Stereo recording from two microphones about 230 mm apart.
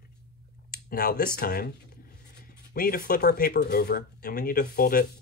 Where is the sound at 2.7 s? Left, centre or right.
Left.